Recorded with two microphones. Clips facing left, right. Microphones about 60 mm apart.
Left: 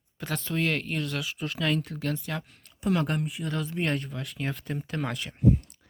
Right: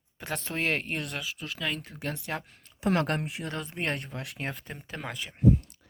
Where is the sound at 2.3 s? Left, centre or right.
Right.